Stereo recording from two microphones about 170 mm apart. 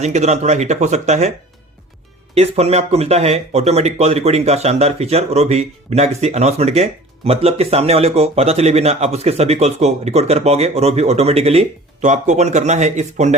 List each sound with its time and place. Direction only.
0.0 s speech: 40° right (ahead or behind)
2.3 s speech: 35° right (ahead or behind)